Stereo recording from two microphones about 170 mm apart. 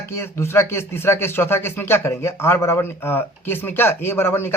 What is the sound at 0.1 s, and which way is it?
A man's voice, 15° left (ahead or behind).